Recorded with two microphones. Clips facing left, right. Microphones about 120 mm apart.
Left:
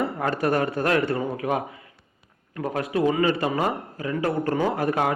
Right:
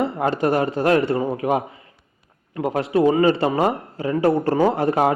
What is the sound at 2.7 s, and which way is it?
A man's voice, 30° right (ahead or behind).